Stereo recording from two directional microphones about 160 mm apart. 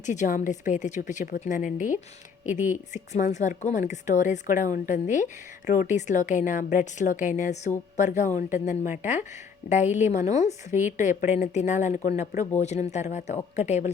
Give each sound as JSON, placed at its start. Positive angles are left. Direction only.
{"t": 0.0, "sound": "a woman's voice", "side_deg": 50}